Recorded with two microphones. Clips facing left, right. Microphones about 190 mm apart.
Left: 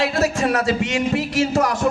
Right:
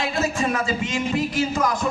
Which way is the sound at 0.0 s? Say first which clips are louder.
Left 4 dB; 70° left (ahead or behind).